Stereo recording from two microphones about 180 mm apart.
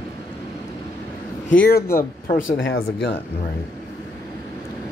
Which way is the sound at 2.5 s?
90° left.